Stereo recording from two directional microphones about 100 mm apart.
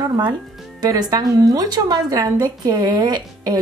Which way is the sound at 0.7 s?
40° right (ahead or behind).